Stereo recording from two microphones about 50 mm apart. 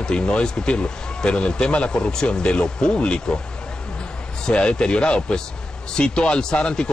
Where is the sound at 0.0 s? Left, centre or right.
Centre.